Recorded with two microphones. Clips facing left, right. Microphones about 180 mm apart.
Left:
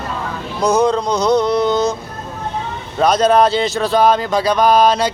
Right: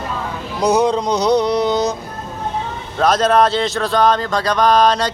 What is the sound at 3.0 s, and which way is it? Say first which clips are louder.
Speech: left 1 dB; centre (ahead or behind).